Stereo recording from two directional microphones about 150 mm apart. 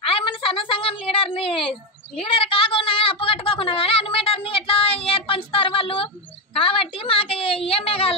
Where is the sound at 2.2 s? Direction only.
40° left (ahead or behind).